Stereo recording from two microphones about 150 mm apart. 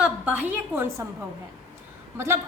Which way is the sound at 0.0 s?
10° right (ahead or behind).